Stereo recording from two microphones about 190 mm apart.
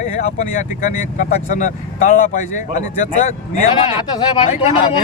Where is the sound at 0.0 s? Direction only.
40° left (ahead or behind).